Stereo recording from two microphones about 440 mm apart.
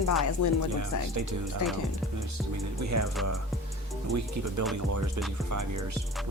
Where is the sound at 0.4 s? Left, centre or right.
Left.